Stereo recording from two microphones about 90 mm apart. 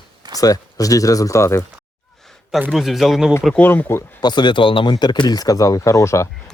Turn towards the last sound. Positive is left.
turn(degrees=35)  # may be behind; listen again after turning